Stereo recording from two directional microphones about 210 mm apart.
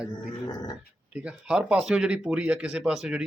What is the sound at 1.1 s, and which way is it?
Speech, 5° right (ahead or behind).